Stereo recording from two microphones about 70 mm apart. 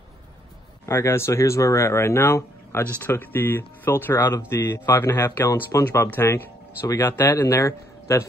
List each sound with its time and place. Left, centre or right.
0.8 s speech: left
5.5 s speech: left
6.2 s speech: left
7.4 s a man's voice: left